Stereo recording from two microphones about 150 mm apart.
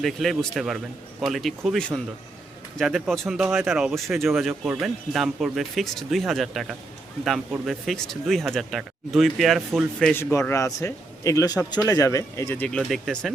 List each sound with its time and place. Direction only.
0.0 s speech: centre (ahead or behind)
10.1 s a man's voice: 15° left (ahead or behind)
12.6 s speech: 5° left (ahead or behind)